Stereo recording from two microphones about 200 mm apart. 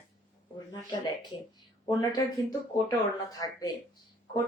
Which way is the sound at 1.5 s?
20° left (ahead or behind).